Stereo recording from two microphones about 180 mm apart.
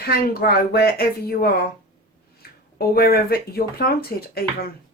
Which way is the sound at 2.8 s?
60° left (ahead or behind).